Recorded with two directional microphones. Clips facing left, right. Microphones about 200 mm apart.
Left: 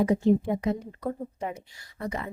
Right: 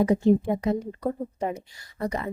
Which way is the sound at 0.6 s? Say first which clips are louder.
Right 3 dB; 40° right (ahead or behind).